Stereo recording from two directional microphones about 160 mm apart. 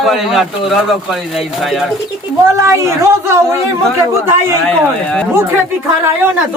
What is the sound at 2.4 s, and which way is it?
Speech, 20° right (ahead or behind).